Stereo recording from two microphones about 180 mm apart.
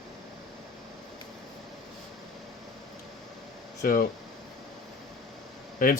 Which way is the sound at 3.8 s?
50° left (ahead or behind).